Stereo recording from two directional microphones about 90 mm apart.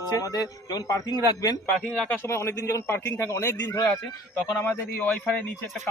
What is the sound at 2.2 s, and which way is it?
A man's voice, 30° left (ahead or behind).